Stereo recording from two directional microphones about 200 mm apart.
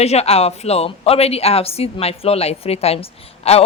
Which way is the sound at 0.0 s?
30° left (ahead or behind).